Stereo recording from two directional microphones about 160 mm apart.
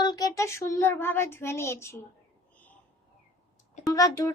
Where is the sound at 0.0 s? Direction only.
25° left (ahead or behind).